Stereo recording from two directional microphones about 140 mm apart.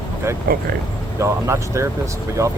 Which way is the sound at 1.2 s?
20° right (ahead or behind).